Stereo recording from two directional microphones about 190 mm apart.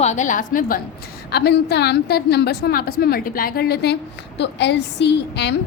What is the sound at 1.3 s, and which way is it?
A woman's voice, 60° left (ahead or behind).